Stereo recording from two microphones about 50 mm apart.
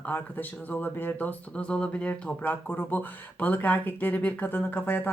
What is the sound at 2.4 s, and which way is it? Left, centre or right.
Speech, left.